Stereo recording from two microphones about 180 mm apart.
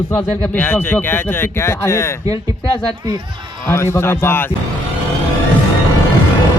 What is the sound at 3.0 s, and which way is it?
Speech, 25° right (ahead or behind).